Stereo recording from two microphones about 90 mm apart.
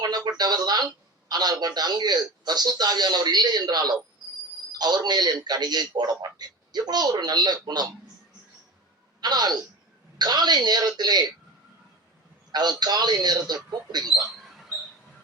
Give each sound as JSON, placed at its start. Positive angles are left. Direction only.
{"t": 0.0, "sound": "a man's voice", "side_deg": -50}
{"t": 9.2, "sound": "a man's voice", "side_deg": -50}
{"t": 12.5, "sound": "a man's voice", "side_deg": -50}